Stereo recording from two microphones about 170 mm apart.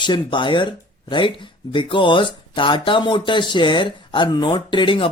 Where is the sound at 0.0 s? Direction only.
30° left (ahead or behind).